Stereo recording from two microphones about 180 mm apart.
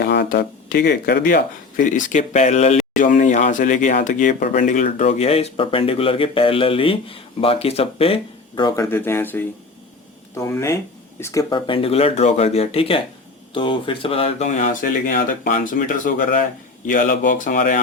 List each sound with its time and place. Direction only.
0.0 s speech: 65° left (ahead or behind); by 17.7 s 45° left (ahead or behind)